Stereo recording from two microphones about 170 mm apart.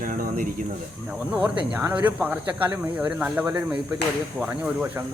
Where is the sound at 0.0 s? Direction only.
55° right (ahead or behind).